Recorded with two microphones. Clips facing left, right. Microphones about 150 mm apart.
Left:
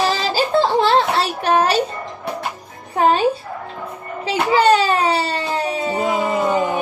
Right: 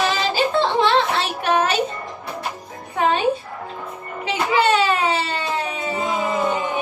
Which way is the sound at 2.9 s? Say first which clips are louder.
Left 4 dB; 35° left (ahead or behind).